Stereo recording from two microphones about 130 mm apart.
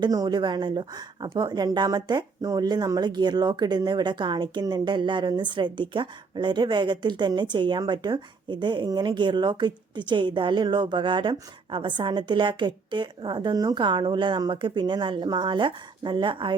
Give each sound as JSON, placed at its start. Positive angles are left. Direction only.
{"t": 0.0, "sound": "speech", "side_deg": -30}